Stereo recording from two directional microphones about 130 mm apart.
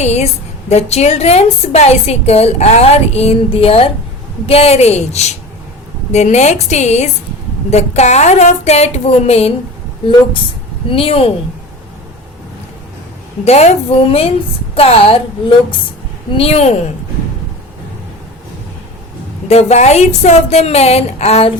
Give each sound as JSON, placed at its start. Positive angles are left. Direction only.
{"t": 0.0, "sound": "a woman's voice", "side_deg": 60}
{"t": 10.8, "sound": "a woman's voice", "side_deg": 45}
{"t": 13.4, "sound": "a woman's voice", "side_deg": 55}
{"t": 19.5, "sound": "a woman's voice", "side_deg": 55}